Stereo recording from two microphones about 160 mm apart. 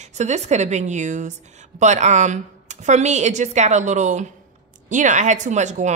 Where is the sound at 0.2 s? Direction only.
45° right (ahead or behind).